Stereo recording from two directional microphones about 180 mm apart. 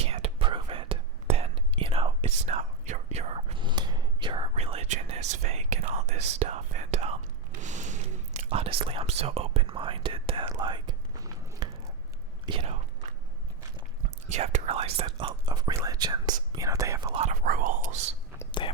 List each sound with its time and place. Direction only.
0.0 s whispering: 35° right (ahead or behind)
12.5 s chewing: 30° right (ahead or behind)
14.3 s whispering: 40° right (ahead or behind); by 17.1 s 15° right (ahead or behind)
17.1 s whispering: 35° right (ahead or behind)
17.4 s whispering: 50° right (ahead or behind)
18.6 s whispering: 30° left (ahead or behind)